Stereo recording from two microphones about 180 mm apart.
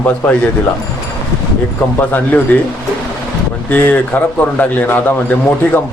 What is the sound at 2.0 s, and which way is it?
Speech, 10° left (ahead or behind).